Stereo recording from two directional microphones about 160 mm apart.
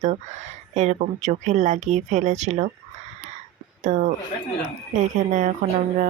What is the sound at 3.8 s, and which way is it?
Speech, 50° right (ahead or behind).